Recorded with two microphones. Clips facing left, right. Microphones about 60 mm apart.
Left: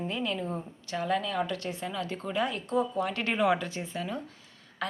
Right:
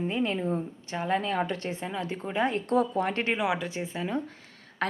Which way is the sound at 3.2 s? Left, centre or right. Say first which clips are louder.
Left 1 dB; centre.